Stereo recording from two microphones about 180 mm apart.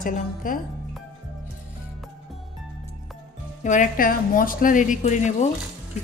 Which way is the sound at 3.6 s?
45° left (ahead or behind).